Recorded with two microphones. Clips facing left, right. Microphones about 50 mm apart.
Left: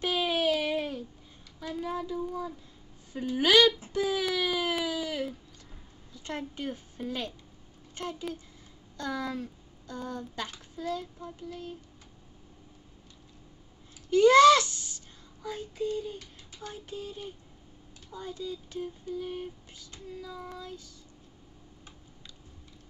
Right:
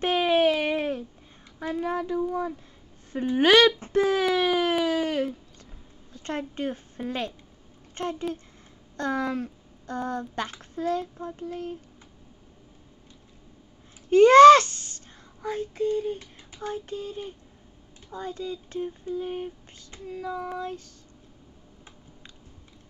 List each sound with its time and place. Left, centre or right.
0.0 s a sound: right
1.6 s speech: right
4.8 s a sound: right
6.1 s a woman's voice: right
14.1 s speech: right
20.1 s speech: right